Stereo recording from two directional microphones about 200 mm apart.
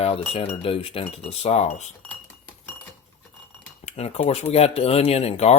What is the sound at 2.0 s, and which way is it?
Glass, 5° left (ahead or behind).